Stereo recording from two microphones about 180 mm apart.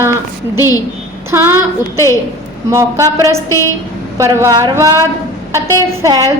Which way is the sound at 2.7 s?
15° right (ahead or behind).